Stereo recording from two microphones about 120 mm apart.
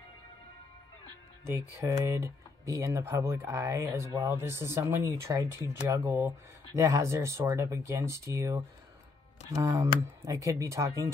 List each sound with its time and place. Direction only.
1.8 s speech: 20° right (ahead or behind)
9.6 s speech: 30° right (ahead or behind)